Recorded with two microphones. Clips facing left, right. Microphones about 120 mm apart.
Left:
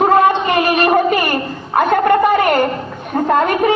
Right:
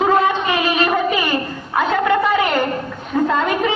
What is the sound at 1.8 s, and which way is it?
Gargling, 50° left (ahead or behind).